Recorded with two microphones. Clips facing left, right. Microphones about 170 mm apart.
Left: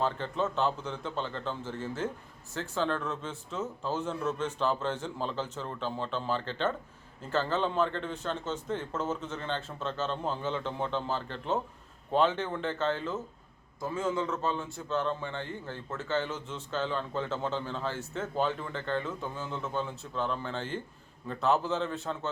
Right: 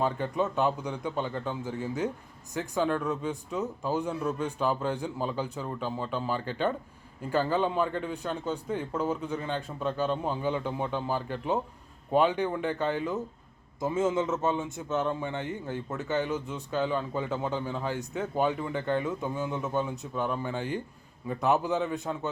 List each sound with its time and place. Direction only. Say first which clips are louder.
0.0 s speech: right 2 dB; 15° right (ahead or behind)